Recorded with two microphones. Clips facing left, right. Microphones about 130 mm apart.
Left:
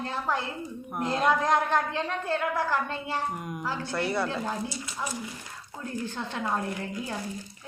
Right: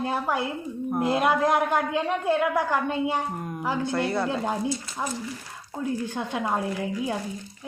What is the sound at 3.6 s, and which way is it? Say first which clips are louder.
A woman's voice: right 5 dB; 20° right (ahead or behind).